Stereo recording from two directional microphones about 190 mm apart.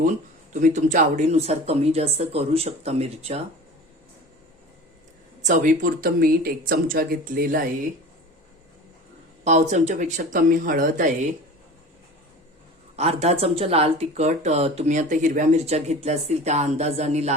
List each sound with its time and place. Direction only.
0.0 s speech: 45° right (ahead or behind)
5.4 s speech: 40° right (ahead or behind)
9.4 s speech: 40° right (ahead or behind)
13.0 s speech: 35° right (ahead or behind)